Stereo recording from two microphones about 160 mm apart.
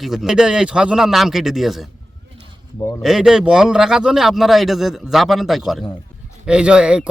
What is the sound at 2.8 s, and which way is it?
Speech, 20° left (ahead or behind).